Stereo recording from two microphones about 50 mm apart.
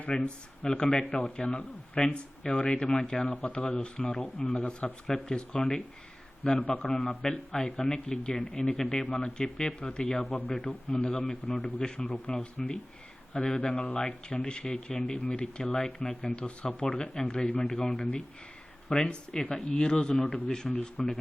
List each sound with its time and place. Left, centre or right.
0.0 s speech: left
4.5 s speech: left
5.0 s speech: centre
6.8 s speech: centre
8.6 s speech: centre
11.1 s speech: centre
12.1 s speech: left
17.7 s speech: centre